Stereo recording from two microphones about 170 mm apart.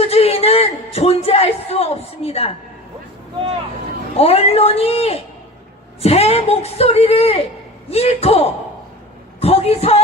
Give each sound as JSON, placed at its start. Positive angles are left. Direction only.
{"t": 0.0, "sound": "a sound", "side_deg": 35}
{"t": 0.9, "sound": "a woman's voice", "side_deg": 35}
{"t": 4.2, "sound": "a woman's voice", "side_deg": 35}